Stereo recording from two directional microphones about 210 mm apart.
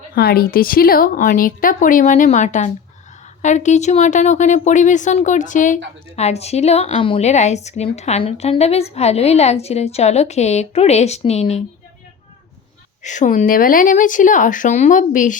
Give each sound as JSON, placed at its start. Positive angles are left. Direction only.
{"t": 0.1, "sound": "a woman's voice", "side_deg": 45}
{"t": 13.0, "sound": "a woman's voice", "side_deg": 35}